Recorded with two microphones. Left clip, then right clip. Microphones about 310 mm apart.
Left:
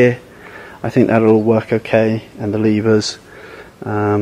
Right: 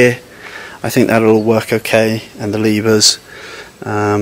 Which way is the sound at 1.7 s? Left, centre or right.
Centre.